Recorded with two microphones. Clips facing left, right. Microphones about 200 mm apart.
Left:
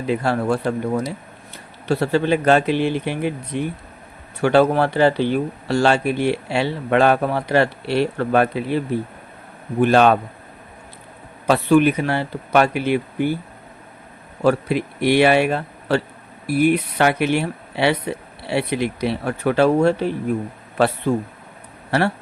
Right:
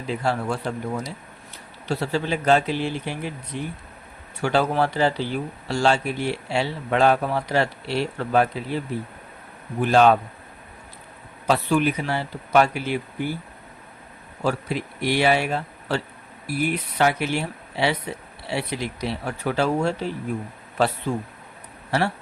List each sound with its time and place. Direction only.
0.1 s speech: 60° left (ahead or behind)
9.8 s speech: 60° left (ahead or behind)
11.4 s speech: 60° left (ahead or behind)
14.4 s speech: 60° left (ahead or behind)